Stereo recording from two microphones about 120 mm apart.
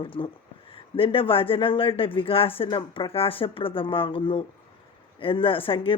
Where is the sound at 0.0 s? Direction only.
50° left (ahead or behind).